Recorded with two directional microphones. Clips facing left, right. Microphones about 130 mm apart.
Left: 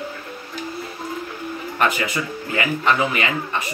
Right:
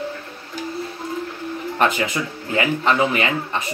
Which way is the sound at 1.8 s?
30° right (ahead or behind).